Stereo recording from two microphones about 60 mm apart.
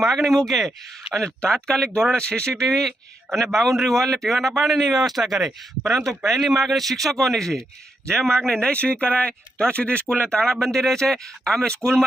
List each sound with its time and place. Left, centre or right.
0.0 s speech: centre
10.4 s speech: centre